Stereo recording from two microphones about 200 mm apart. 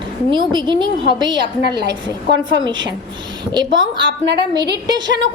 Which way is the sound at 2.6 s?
20° right (ahead or behind).